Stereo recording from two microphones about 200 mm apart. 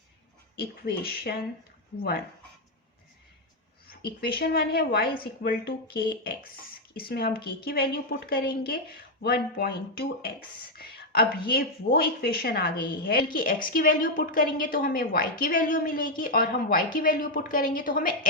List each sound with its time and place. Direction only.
0.6 s a woman's voice: 50° left (ahead or behind)
4.2 s a woman's voice: 50° left (ahead or behind)